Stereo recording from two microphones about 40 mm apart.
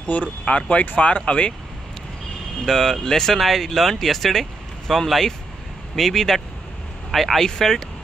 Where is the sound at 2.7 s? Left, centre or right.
Centre.